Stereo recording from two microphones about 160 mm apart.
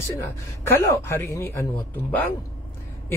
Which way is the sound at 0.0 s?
15° left (ahead or behind).